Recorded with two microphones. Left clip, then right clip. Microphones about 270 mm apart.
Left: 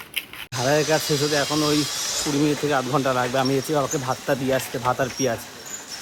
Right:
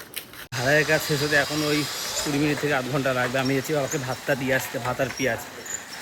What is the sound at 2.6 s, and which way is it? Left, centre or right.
Speech, centre.